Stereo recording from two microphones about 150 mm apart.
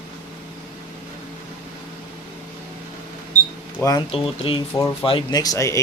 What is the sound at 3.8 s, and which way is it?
Speech, 15° left (ahead or behind).